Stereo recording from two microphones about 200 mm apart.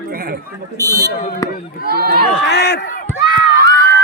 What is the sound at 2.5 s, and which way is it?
Speech, 55° left (ahead or behind).